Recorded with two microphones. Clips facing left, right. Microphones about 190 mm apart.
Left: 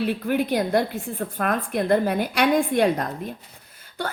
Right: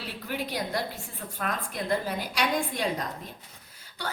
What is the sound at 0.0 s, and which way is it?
A woman's voice, 55° left (ahead or behind).